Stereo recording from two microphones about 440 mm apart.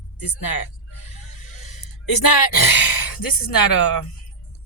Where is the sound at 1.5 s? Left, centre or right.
Left.